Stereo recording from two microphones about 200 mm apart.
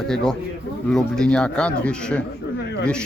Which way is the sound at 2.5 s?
55° left (ahead or behind).